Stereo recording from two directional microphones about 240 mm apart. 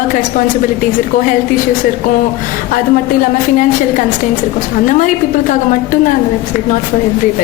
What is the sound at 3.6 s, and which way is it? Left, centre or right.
Speech, left.